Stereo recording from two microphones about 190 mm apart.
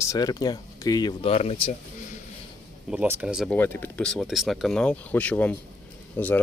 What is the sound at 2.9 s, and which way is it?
Speech, 10° right (ahead or behind).